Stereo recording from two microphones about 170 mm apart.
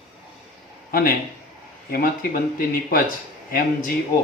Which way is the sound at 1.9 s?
60° left (ahead or behind).